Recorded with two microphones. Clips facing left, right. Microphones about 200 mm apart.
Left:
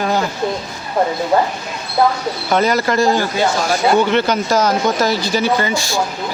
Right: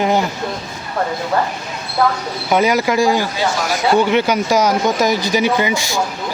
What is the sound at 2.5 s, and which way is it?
Speech, 10° right (ahead or behind).